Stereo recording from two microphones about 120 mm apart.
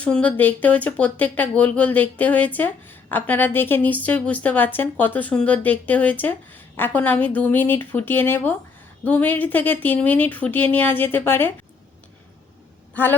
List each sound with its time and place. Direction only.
0.0 s speech: 10° left (ahead or behind)
12.9 s speech: 15° left (ahead or behind)